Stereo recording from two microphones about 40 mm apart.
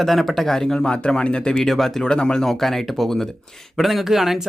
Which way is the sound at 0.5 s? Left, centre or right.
Centre.